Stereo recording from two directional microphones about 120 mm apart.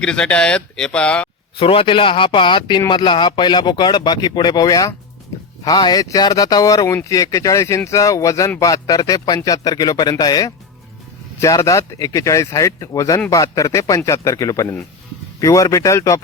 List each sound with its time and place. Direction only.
0.0 s speech: 10° left (ahead or behind)
1.5 s a man's voice: 50° left (ahead or behind); by 16.2 s 25° left (ahead or behind)